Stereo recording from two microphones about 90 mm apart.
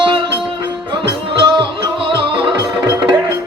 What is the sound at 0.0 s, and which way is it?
Music, 65° right (ahead or behind).